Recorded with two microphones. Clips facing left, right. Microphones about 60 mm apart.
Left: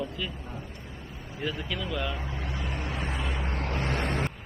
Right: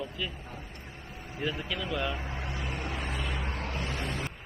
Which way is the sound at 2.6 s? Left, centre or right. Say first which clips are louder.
Left 2 dB; centre.